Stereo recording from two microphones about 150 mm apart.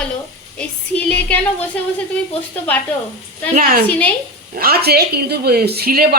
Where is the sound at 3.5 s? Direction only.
70° right (ahead or behind).